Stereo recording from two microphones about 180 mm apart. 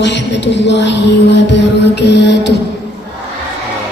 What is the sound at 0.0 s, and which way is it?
Music, 75° left (ahead or behind).